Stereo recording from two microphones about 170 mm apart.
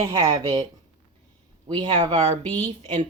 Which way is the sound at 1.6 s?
25° right (ahead or behind).